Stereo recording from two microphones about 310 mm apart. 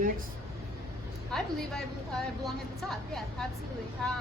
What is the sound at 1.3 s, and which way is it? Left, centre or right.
A woman's voice, centre.